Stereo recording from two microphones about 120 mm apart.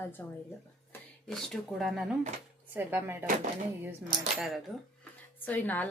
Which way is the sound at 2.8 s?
20° right (ahead or behind).